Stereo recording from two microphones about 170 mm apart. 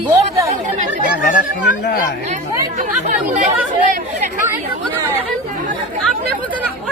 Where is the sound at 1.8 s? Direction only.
55° left (ahead or behind).